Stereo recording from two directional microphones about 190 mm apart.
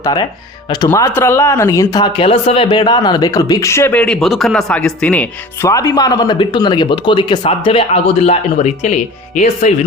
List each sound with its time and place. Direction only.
0.0 s speech: 20° left (ahead or behind); by 9.7 s 40° left (ahead or behind)